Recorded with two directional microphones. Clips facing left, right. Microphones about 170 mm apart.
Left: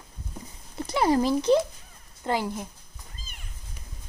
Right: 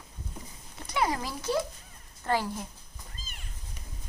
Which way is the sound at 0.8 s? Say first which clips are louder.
Left 8 dB; 30° left (ahead or behind).